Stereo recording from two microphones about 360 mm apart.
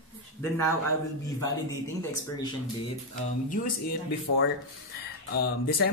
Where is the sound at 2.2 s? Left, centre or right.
Centre.